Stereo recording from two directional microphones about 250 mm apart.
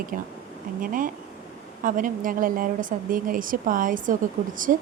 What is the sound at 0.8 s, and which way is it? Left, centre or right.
A woman's voice, right.